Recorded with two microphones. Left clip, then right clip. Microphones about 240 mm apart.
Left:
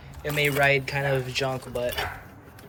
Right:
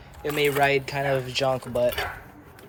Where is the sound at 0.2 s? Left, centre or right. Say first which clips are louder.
Right 1 dB; centre.